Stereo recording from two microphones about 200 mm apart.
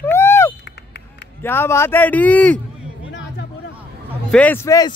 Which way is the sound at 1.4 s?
10° left (ahead or behind).